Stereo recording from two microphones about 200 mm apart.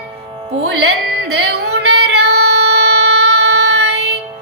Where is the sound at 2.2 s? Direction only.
55° right (ahead or behind).